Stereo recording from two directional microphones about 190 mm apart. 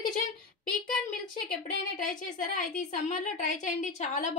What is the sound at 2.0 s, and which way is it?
A woman's voice, 45° left (ahead or behind).